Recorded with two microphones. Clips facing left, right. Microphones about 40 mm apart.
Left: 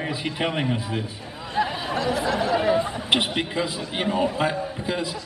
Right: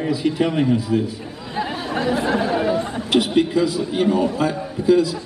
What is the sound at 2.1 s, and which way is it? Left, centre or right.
Speech, right.